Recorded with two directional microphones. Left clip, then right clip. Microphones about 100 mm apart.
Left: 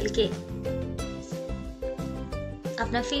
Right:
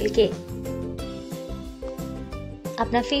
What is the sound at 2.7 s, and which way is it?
Speech, 30° right (ahead or behind).